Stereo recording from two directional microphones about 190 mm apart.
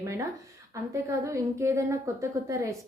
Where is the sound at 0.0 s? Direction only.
15° right (ahead or behind).